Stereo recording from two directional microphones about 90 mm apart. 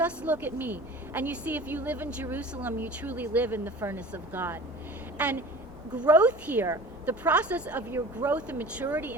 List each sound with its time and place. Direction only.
0.0 s a woman's voice: 15° right (ahead or behind)
5.1 s a sound: 15° right (ahead or behind)
6.0 s speech: 15° right (ahead or behind)